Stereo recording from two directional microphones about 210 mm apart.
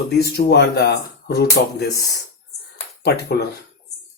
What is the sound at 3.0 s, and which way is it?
Speech, 50° left (ahead or behind).